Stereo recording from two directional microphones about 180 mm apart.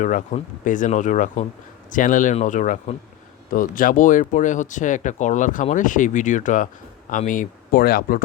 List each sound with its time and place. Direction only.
0.0 s speech: 45° left (ahead or behind)